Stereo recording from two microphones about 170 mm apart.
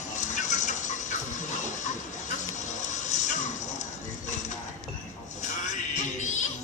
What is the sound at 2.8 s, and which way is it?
Music, 45° left (ahead or behind).